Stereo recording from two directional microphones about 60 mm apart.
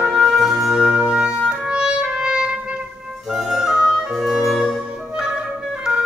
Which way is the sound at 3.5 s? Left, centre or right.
Centre.